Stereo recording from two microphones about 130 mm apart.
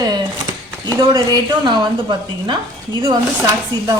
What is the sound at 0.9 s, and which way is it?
A woman's voice, 35° right (ahead or behind).